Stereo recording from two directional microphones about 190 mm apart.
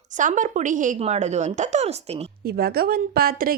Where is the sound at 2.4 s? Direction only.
55° right (ahead or behind).